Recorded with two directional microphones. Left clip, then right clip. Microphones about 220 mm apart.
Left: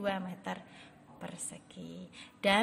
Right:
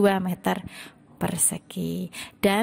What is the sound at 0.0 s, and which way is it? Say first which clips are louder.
A woman's voice: right 14 dB; 50° right (ahead or behind).